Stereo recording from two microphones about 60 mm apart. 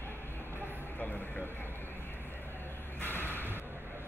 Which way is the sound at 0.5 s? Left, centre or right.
Left.